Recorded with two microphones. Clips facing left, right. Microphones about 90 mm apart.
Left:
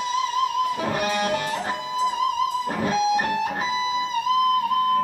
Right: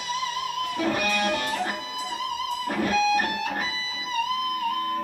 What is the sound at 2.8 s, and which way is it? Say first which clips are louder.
Music: even; 30° left (ahead or behind).